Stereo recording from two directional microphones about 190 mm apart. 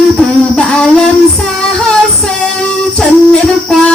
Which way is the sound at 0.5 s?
5° left (ahead or behind).